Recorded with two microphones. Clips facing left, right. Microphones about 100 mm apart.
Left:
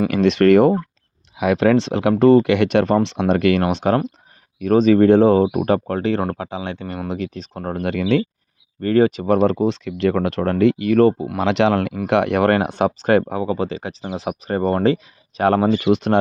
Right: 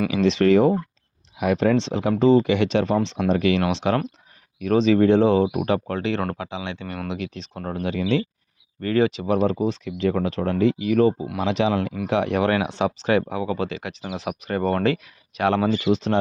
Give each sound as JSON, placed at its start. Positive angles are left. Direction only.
{"t": 0.1, "sound": "speech", "side_deg": 60}
{"t": 1.4, "sound": "speech", "side_deg": 85}
{"t": 3.6, "sound": "speech", "side_deg": 45}
{"t": 7.8, "sound": "speech", "side_deg": 60}
{"t": 8.8, "sound": "speech", "side_deg": 40}
{"t": 12.0, "sound": "speech", "side_deg": 65}
{"t": 15.4, "sound": "speech", "side_deg": 45}